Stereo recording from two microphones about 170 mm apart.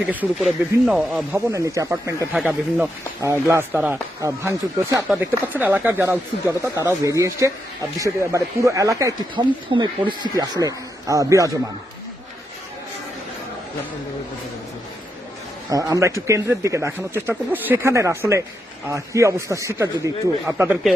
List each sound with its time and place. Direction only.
0.0 s speech: 10° right (ahead or behind)
2.3 s speech: centre (ahead or behind)
3.2 s speech: 15° right (ahead or behind)
15.7 s speech: 20° right (ahead or behind)